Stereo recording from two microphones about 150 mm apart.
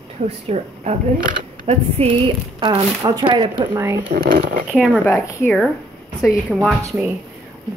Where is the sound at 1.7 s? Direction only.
40° right (ahead or behind).